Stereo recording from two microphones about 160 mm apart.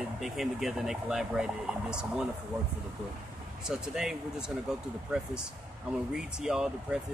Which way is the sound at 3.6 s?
5° right (ahead or behind).